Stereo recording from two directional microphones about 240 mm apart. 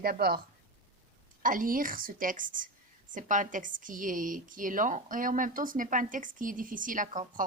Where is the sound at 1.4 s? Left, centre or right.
Right.